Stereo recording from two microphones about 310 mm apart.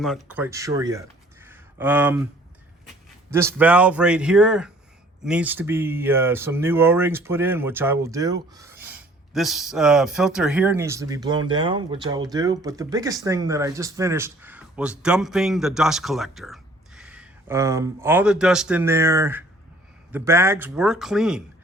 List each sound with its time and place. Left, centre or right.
0.0 s speech: centre
3.3 s a man's voice: centre